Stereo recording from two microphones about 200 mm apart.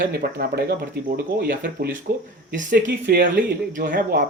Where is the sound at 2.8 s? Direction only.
60° right (ahead or behind).